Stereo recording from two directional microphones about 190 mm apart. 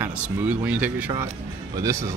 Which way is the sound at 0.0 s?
10° right (ahead or behind).